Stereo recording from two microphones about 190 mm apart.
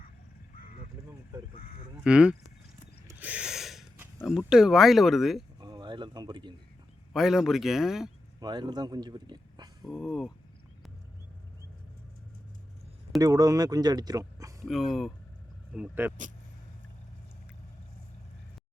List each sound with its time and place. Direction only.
2.0 s speech: 5° right (ahead or behind)
3.1 s snort: 10° right (ahead or behind)
4.0 s speech: 5° right (ahead or behind)
5.5 s a sound: 20° right (ahead or behind)
7.1 s speech: centre (ahead or behind)
8.4 s a man's voice: 20° right (ahead or behind)
9.8 s speech: centre (ahead or behind)
13.1 s speech: 20° right (ahead or behind)
14.6 s speech: centre (ahead or behind)